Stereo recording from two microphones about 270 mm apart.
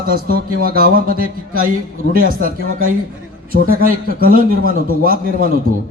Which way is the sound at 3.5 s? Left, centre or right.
Right.